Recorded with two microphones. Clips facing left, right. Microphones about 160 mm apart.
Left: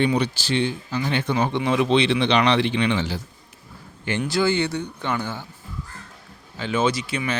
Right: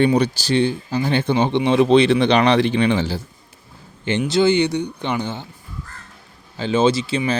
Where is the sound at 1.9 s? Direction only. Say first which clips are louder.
Right 5 dB; 45° right (ahead or behind).